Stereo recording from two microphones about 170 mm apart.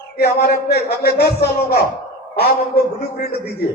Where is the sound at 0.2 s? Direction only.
65° left (ahead or behind).